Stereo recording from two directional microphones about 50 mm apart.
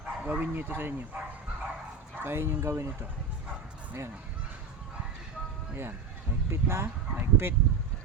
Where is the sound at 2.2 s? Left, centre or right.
Right.